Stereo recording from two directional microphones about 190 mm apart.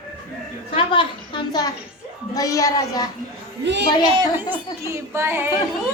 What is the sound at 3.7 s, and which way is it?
Speech, 65° right (ahead or behind).